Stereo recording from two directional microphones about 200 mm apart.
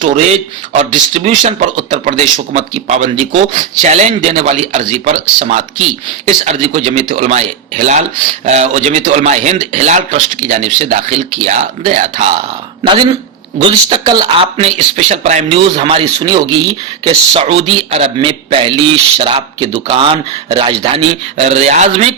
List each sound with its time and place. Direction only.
0.0 s a man's voice: 35° right (ahead or behind)
13.9 s a man's voice: 25° right (ahead or behind)